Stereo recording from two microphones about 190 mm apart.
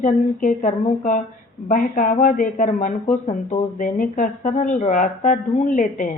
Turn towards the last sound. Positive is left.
turn(degrees=45)  # may be behind; listen again after turning